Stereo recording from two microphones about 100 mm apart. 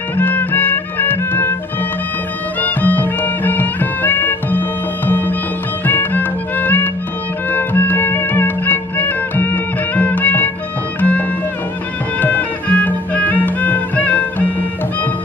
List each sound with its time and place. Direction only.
0.2 s music: 20° left (ahead or behind)
2.6 s music: 15° left (ahead or behind)